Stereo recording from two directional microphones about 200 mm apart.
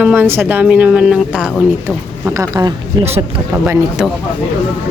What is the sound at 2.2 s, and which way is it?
Speech, 15° right (ahead or behind).